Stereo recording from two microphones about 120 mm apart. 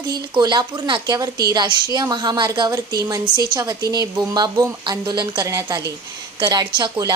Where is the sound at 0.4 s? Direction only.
35° right (ahead or behind).